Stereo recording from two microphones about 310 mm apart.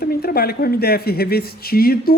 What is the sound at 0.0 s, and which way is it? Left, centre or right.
Speech, left.